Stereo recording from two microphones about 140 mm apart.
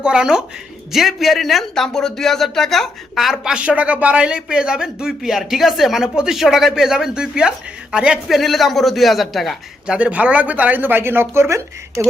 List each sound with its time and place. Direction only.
0.0 s a man's voice: 5° right (ahead or behind)